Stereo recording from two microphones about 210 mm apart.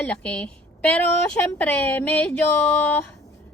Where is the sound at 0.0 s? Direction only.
5° left (ahead or behind).